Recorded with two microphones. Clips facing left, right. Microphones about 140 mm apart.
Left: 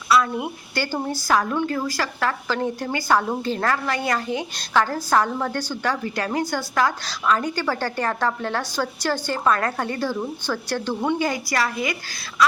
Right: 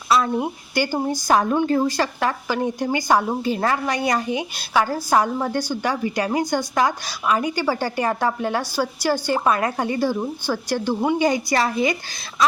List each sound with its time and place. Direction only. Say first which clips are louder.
0.1 s speech: right 1 dB; 25° right (ahead or behind)
0.7 s speech: right 3 dB; 15° right (ahead or behind)
11.2 s a woman's voice: right 4 dB; 20° right (ahead or behind)